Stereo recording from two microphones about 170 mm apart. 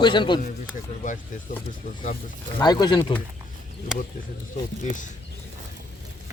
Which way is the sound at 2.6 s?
25° left (ahead or behind).